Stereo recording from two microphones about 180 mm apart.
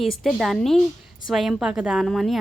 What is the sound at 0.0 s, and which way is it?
A woman's voice, centre (ahead or behind).